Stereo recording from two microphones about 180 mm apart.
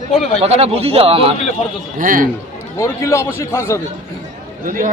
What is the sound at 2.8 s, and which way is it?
A man's voice, 15° left (ahead or behind).